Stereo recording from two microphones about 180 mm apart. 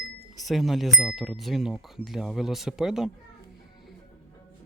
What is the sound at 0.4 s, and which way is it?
Speech, centre (ahead or behind).